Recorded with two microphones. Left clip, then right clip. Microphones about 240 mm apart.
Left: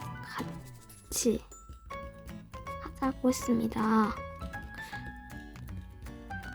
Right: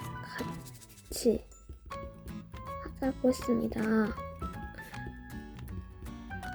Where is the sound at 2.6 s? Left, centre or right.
Centre.